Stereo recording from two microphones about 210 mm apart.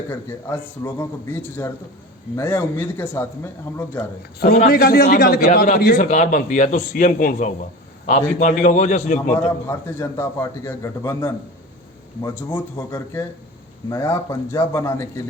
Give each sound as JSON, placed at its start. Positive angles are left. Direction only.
{"t": 0.1, "sound": "a man's voice", "side_deg": 10}
{"t": 4.4, "sound": "a man's voice", "side_deg": 50}
{"t": 9.3, "sound": "a man's voice", "side_deg": 10}